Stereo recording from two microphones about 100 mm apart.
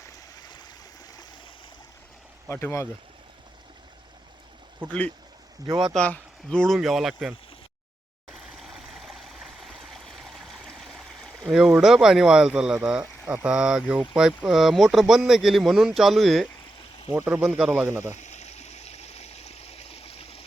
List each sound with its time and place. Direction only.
0.0 s stream: 40° left (ahead or behind)
2.5 s speech: 25° left (ahead or behind)
5.9 s speech: 10° left (ahead or behind)
8.3 s stream: centre (ahead or behind)
11.8 s speech: 5° right (ahead or behind)
17.1 s speech: 10° right (ahead or behind)
18.4 s stream: 90° left